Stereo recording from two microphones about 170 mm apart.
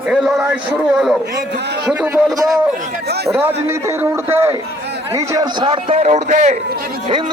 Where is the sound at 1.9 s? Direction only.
10° right (ahead or behind).